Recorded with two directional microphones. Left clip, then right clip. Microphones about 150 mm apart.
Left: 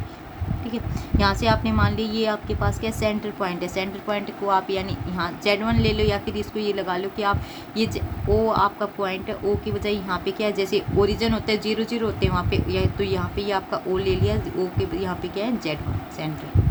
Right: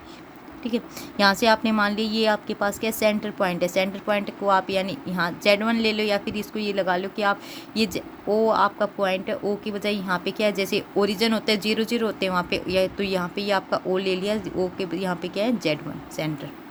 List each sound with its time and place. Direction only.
0.7 s a woman's voice: 65° right (ahead or behind)